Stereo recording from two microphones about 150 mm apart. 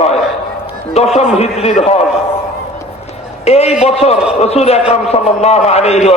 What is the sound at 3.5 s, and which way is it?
A man's voice, 45° left (ahead or behind).